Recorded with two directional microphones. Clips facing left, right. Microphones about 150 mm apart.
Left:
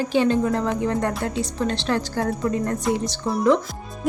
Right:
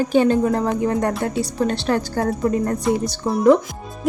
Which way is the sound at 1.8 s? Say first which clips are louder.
Right 3 dB; 40° right (ahead or behind).